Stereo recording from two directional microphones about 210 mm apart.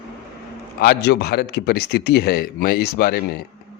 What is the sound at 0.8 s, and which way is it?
A man's voice, 50° left (ahead or behind).